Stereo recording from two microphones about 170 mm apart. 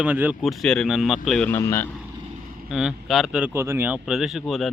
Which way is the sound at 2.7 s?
5° right (ahead or behind).